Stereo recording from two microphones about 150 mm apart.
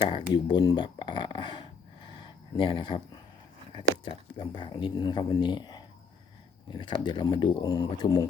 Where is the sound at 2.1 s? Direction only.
35° left (ahead or behind).